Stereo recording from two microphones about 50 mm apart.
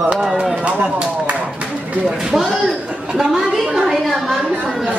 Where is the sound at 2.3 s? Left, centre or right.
Centre.